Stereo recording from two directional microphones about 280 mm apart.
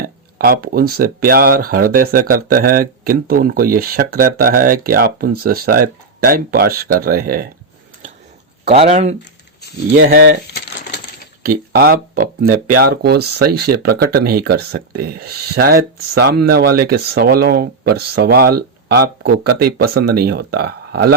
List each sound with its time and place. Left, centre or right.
0.3 s speech: right
8.6 s speech: right
10.5 s coin: left
11.4 s speech: right